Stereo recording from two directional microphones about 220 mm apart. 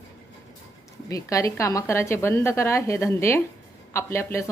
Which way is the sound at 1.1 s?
15° left (ahead or behind).